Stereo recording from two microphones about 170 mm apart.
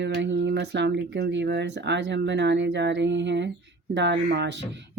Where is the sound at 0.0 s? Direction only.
90° right.